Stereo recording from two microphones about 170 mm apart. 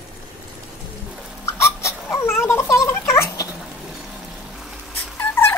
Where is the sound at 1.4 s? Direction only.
15° left (ahead or behind).